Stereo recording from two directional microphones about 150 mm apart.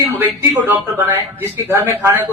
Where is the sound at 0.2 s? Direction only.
15° right (ahead or behind).